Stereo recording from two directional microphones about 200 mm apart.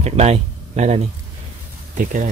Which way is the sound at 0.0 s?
30° right (ahead or behind).